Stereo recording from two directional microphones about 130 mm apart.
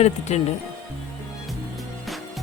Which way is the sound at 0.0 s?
55° left (ahead or behind).